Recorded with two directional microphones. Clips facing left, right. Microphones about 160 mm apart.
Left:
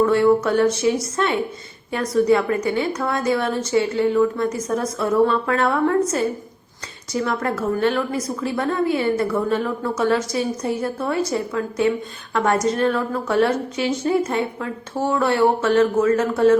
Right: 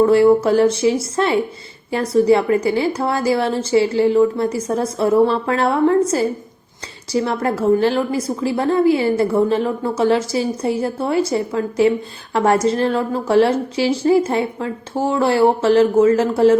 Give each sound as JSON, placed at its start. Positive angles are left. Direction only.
{"t": 0.0, "sound": "a woman's voice", "side_deg": -30}